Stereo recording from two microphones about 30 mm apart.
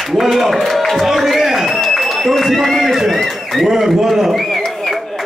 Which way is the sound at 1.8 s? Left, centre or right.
Centre.